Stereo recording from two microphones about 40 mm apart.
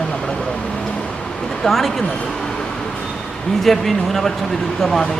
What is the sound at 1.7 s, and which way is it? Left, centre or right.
Speech, centre.